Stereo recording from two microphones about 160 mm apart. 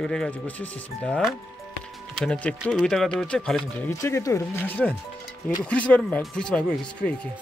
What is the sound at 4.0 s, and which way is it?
Speech, 20° left (ahead or behind).